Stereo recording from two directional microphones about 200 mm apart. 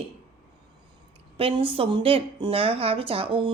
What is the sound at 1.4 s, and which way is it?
A woman's voice, 25° right (ahead or behind).